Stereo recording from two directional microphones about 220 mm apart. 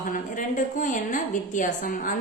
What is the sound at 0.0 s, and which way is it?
A woman's voice, 35° left (ahead or behind).